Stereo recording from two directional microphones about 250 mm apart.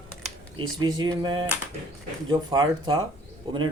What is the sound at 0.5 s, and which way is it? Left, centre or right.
Speech, centre.